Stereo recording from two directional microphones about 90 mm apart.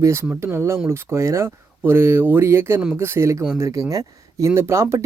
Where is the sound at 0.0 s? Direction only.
30° right (ahead or behind).